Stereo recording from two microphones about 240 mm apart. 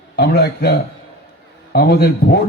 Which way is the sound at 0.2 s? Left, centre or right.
Left.